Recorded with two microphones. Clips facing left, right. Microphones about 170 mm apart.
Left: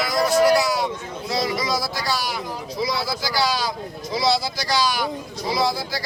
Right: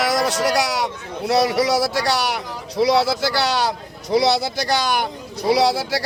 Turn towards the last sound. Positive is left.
turn(degrees=-75)  # may be behind; listen again after turning